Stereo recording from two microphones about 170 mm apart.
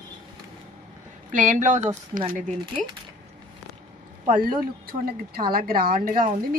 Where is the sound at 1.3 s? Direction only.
50° right (ahead or behind).